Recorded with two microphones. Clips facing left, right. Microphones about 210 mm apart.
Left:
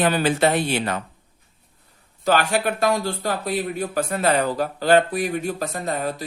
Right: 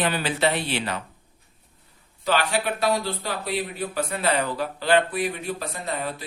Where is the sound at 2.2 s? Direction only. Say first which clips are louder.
Left 4 dB; 45° left (ahead or behind).